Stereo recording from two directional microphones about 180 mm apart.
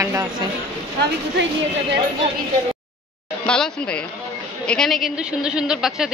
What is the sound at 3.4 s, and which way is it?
A woman's voice, 5° left (ahead or behind).